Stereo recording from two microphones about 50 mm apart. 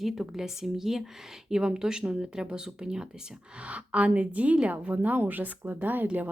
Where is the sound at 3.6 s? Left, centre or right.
Right.